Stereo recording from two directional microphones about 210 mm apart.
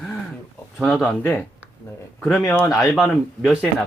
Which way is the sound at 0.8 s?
Centre (ahead or behind).